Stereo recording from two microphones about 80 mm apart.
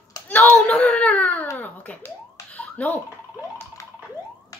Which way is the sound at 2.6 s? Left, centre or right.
Centre.